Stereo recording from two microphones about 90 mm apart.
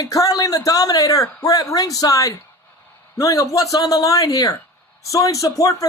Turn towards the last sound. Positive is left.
turn(degrees=40)  # may be behind; listen again after turning